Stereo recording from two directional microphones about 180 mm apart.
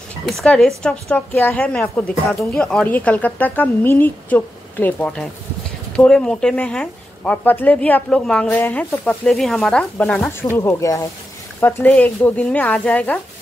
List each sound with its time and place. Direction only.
0.3 s a woman's voice: centre (ahead or behind)
10.2 s a woman's voice: 15° left (ahead or behind)